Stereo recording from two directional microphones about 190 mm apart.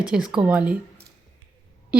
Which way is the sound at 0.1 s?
5° right (ahead or behind).